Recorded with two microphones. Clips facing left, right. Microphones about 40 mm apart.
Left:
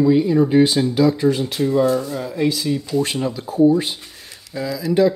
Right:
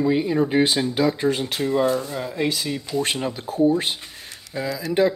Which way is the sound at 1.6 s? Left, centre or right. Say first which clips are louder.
Left 4 dB; right.